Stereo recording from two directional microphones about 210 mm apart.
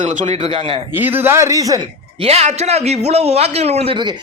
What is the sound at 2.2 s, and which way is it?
A man's voice, 30° right (ahead or behind).